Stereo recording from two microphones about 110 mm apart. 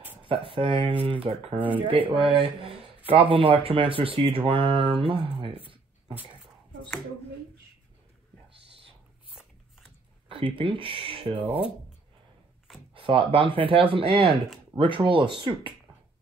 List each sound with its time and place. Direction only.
0.5 s speech: 55° right (ahead or behind)
10.5 s speech: 55° right (ahead or behind)
11.4 s speech: 15° right (ahead or behind)
12.9 s speech: 55° right (ahead or behind)